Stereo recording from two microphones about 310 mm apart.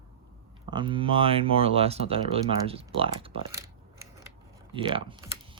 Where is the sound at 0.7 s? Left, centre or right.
Centre.